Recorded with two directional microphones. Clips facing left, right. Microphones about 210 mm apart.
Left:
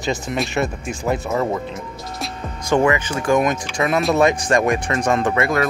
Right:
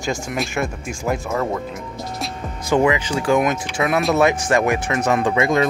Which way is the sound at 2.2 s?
10° right (ahead or behind).